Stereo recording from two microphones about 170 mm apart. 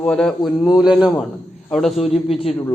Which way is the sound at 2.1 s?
35° left (ahead or behind).